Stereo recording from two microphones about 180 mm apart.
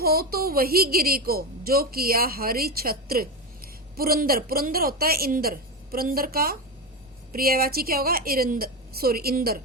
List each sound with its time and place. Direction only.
0.0 s a woman's voice: 55° right (ahead or behind)